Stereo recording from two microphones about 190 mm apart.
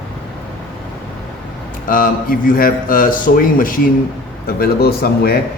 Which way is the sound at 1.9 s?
50° left (ahead or behind).